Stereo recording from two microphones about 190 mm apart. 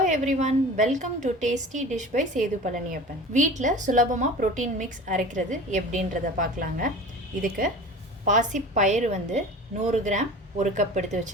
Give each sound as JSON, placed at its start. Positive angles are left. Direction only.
{"t": 0.1, "sound": "a woman's voice", "side_deg": -40}
{"t": 8.2, "sound": "a woman's voice", "side_deg": -40}